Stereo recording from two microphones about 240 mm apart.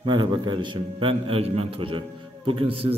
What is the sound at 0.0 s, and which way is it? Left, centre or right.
A man's voice, centre.